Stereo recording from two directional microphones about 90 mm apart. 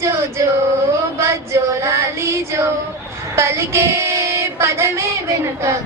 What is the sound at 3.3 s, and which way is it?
Female singing, 30° right (ahead or behind).